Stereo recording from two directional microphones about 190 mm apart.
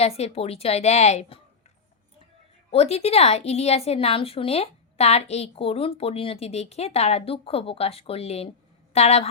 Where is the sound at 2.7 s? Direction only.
35° left (ahead or behind).